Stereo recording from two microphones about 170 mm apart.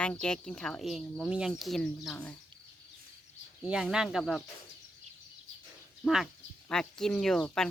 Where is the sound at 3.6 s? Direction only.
5° right (ahead or behind).